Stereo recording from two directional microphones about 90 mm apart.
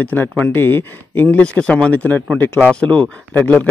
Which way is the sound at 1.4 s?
10° left (ahead or behind).